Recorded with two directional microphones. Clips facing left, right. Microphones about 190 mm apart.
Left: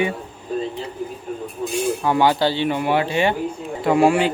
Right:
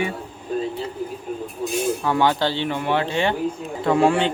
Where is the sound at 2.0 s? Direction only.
15° left (ahead or behind).